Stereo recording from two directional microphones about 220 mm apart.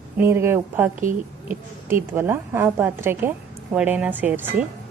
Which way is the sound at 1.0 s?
35° right (ahead or behind).